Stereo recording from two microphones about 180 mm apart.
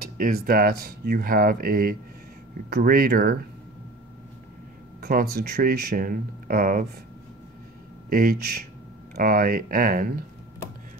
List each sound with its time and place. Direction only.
0.0 s speech: 55° right (ahead or behind)
5.0 s speech: 60° right (ahead or behind)
8.1 s speech: 55° right (ahead or behind)